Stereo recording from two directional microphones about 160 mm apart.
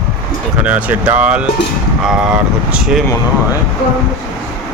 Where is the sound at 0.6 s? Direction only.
10° right (ahead or behind).